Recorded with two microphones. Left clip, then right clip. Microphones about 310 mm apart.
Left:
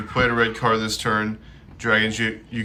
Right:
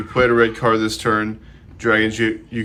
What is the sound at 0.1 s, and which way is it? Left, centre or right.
Speech, centre.